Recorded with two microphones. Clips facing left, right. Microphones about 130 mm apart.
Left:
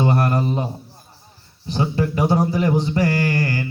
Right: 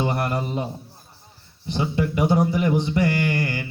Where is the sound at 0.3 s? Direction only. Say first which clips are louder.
Left 5 dB; 25° left (ahead or behind).